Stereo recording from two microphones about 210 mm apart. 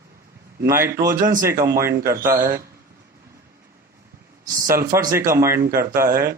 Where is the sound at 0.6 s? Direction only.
10° right (ahead or behind).